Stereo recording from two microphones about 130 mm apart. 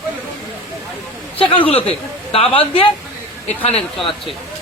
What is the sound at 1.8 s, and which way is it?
Speech, 45° left (ahead or behind).